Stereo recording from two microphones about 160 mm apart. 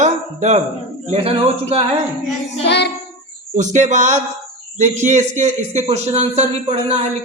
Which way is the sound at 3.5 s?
50° right (ahead or behind).